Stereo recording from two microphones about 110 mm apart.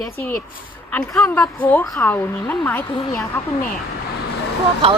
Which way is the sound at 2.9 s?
50° left (ahead or behind).